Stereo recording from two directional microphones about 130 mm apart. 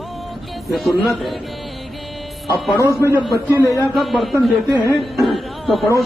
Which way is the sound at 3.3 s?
25° left (ahead or behind).